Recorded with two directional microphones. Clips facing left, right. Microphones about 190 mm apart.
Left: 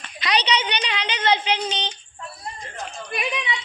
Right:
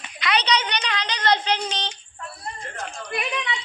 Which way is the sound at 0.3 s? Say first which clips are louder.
Even; 25° left (ahead or behind).